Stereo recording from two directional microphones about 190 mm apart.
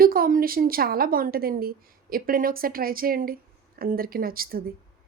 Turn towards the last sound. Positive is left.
turn(degrees=-50)  # may be behind; listen again after turning